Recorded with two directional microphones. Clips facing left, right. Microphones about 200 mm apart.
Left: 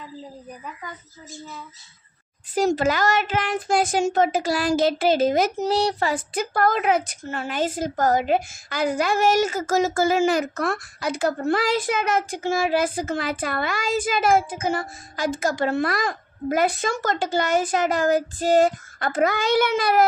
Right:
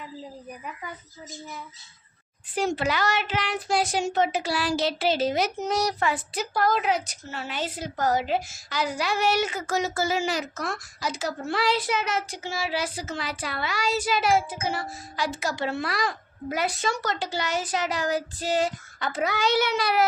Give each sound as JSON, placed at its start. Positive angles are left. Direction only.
{"t": 0.6, "sound": "speech", "side_deg": -15}
{"t": 2.6, "sound": "a woman's voice", "side_deg": 40}
{"t": 5.6, "sound": "a woman's voice", "side_deg": 30}